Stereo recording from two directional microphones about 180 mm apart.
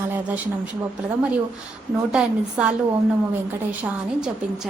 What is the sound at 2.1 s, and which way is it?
Speech, 5° right (ahead or behind).